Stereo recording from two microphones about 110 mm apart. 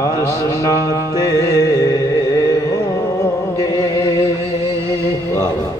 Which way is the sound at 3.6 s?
30° left (ahead or behind).